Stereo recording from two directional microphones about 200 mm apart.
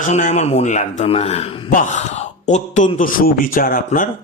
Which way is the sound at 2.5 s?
40° left (ahead or behind).